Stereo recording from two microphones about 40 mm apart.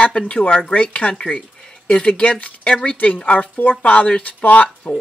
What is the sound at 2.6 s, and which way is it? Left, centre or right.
Speech, left.